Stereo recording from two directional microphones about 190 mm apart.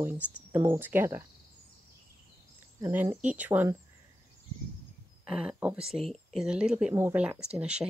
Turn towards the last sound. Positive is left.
turn(degrees=-5)  # may be behind; listen again after turning